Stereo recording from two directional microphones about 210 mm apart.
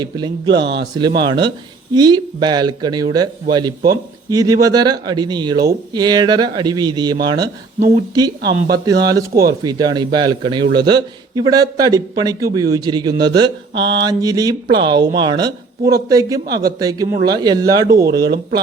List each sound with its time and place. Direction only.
0.0 s a man's voice: 20° right (ahead or behind)